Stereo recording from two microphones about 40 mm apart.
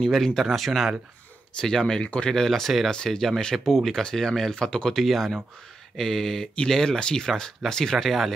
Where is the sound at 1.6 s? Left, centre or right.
Centre.